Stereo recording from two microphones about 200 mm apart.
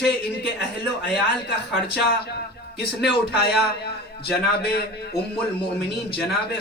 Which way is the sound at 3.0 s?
55° left (ahead or behind).